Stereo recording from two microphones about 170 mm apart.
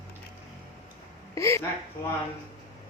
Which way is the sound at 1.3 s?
15° left (ahead or behind).